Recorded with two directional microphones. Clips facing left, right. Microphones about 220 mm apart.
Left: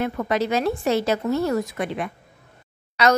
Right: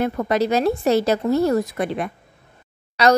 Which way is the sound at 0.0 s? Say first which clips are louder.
Right 3 dB; 40° right (ahead or behind).